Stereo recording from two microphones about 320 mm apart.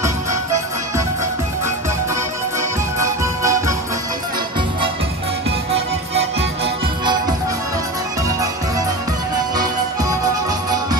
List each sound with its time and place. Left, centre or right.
0.0 s music: centre
3.0 s music: centre
6.1 s music: centre